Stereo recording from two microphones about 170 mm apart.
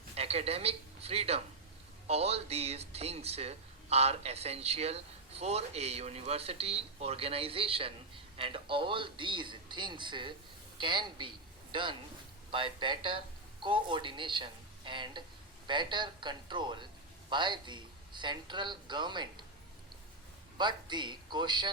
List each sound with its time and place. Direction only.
0.2 s a man's voice: 35° right (ahead or behind)
20.6 s speech: 25° right (ahead or behind)